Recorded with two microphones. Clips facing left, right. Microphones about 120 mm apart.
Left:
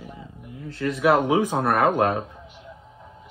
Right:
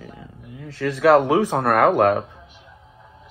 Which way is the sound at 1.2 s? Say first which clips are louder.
Right 3 dB; 65° right (ahead or behind).